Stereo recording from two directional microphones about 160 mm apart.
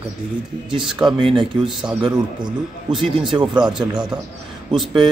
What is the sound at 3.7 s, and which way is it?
Speech, 5° right (ahead or behind).